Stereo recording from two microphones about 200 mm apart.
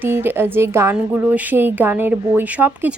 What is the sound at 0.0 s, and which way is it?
A woman's voice, 10° right (ahead or behind).